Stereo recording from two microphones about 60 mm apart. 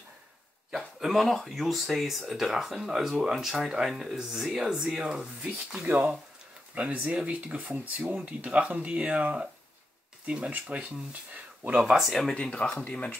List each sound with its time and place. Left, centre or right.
0.7 s speech: centre
5.9 s speech: right
11.8 s speech: centre
12.4 s speech: centre